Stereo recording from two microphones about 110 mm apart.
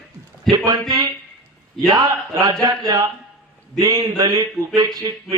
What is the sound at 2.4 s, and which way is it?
A man's voice, 35° right (ahead or behind).